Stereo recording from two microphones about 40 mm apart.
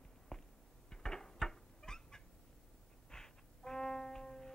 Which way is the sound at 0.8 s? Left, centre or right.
Centre.